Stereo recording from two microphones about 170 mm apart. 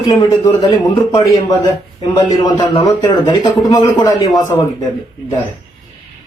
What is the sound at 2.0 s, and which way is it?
A man's voice, 25° left (ahead or behind).